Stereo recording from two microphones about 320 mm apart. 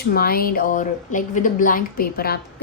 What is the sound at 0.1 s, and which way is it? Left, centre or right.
Speech, left.